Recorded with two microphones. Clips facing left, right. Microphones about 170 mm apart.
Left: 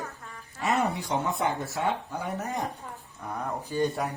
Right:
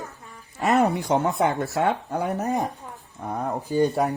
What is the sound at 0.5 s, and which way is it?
Speech, 65° right (ahead or behind).